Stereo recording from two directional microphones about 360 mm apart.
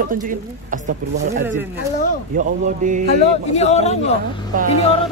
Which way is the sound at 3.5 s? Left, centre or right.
Centre.